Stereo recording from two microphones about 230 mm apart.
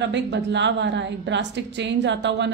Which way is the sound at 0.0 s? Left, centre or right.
Right.